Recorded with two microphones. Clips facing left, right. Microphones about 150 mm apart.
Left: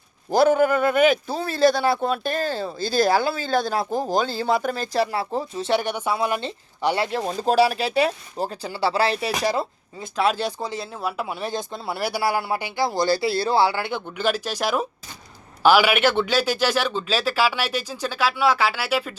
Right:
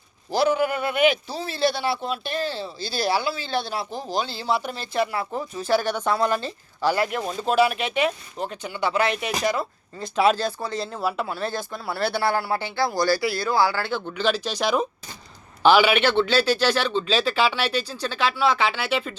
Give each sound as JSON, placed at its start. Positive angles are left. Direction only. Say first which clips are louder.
{"t": 0.3, "sound": "speech", "louder": "left 4 dB", "side_deg": 50}
{"t": 5.1, "sound": "speech", "louder": "left 2 dB", "side_deg": 30}
{"t": 6.4, "sound": "speech", "louder": "even", "side_deg": 25}
{"t": 10.3, "sound": "speech", "louder": "even", "side_deg": 15}
{"t": 10.8, "sound": "speech", "louder": "right 2 dB", "side_deg": 0}
{"t": 11.3, "sound": "speech", "louder": "even", "side_deg": 15}
{"t": 14.1, "sound": "speech", "louder": "even", "side_deg": 10}